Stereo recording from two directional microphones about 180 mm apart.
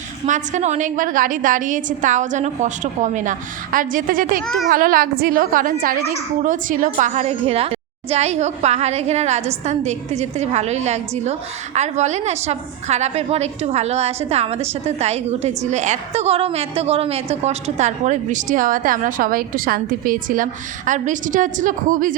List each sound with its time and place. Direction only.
0.3 s a woman's voice: 45° right (ahead or behind)
4.4 s a child's voice: centre (ahead or behind)
4.7 s a woman's voice: 50° right (ahead or behind)